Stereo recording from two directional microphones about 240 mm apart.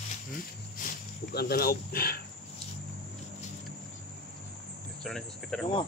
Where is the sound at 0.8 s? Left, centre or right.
Left.